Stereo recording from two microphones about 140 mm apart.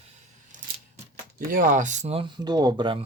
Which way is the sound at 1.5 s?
75° right (ahead or behind).